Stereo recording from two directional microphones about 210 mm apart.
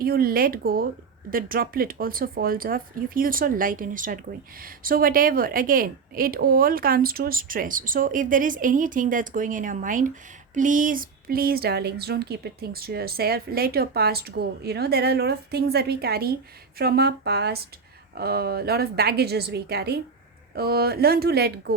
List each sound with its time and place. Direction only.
0.0 s a woman's voice: 45° right (ahead or behind)